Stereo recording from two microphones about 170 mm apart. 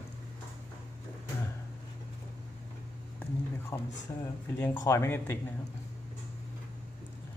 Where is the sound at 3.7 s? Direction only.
15° left (ahead or behind).